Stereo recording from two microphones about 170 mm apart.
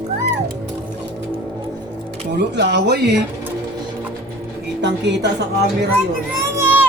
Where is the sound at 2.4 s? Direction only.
85° right.